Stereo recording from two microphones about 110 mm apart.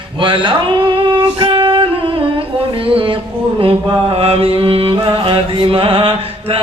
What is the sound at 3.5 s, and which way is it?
Speech, 55° right (ahead or behind).